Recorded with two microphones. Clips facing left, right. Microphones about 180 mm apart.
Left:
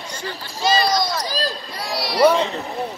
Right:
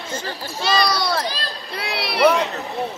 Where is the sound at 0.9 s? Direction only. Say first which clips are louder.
Left 1 dB; 65° right (ahead or behind).